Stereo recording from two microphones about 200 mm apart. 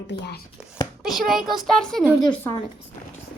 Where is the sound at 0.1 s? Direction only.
60° left (ahead or behind).